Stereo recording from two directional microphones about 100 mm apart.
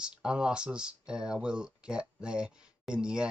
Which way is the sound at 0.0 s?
10° right (ahead or behind).